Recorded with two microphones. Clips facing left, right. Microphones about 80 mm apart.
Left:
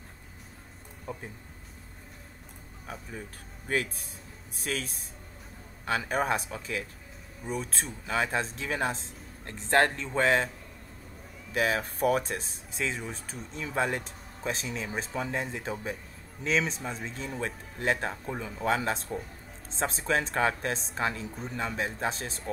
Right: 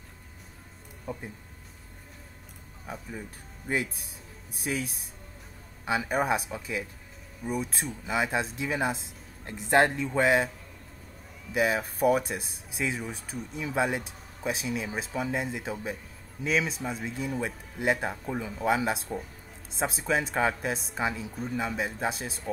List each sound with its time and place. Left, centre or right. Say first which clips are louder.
1.1 s speech: right 2 dB; centre
2.9 s speech: right 2 dB; centre
11.5 s speech: right 2 dB; centre